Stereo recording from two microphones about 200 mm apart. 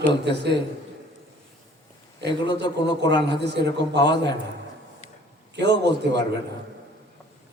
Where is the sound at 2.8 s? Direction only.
60° right (ahead or behind).